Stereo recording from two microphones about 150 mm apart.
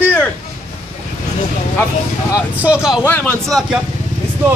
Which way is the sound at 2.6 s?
5° right (ahead or behind).